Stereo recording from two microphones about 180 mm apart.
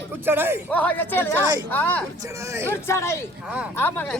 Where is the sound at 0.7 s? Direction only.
10° left (ahead or behind).